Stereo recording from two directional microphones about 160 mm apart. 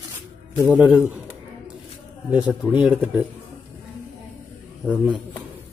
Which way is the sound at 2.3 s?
5° right (ahead or behind).